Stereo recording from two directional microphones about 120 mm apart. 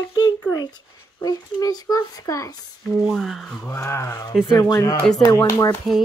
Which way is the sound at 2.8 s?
Centre (ahead or behind).